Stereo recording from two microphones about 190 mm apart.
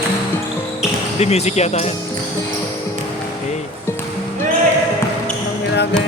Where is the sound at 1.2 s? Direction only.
35° left (ahead or behind).